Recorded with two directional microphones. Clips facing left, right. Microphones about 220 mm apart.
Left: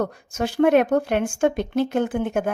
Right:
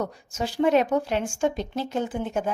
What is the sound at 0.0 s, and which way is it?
Speech, 60° left (ahead or behind).